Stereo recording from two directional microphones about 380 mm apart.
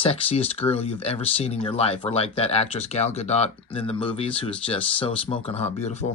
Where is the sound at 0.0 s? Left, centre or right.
Centre.